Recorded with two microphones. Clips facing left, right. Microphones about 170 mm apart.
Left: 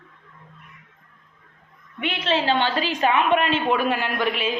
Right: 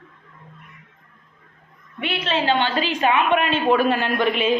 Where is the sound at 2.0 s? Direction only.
20° left (ahead or behind).